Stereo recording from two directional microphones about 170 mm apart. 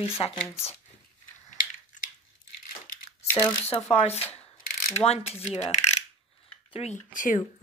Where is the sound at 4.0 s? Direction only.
40° left (ahead or behind).